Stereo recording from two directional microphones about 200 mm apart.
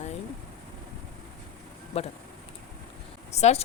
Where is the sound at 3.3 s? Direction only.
35° left (ahead or behind).